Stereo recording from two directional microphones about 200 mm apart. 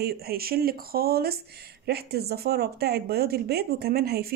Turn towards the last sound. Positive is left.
turn(degrees=-50)  # may be behind; listen again after turning